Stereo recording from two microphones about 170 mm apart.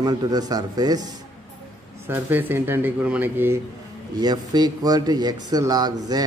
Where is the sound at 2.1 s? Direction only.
10° right (ahead or behind).